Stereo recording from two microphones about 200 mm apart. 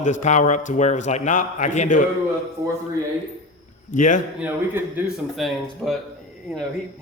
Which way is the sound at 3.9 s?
40° left (ahead or behind).